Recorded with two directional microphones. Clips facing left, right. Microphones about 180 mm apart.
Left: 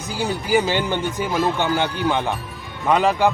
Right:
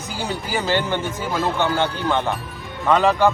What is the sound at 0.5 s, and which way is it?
Speech, 15° left (ahead or behind).